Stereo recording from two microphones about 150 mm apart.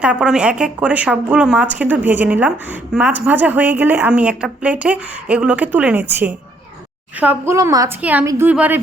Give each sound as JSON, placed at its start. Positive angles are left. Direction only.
{"t": 0.0, "sound": "a woman's voice", "side_deg": -5}
{"t": 8.0, "sound": "a woman's voice", "side_deg": -10}